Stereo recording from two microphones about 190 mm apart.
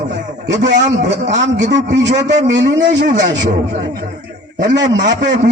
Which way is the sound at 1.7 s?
65° right (ahead or behind).